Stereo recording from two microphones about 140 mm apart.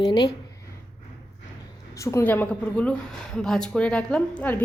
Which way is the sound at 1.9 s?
20° left (ahead or behind).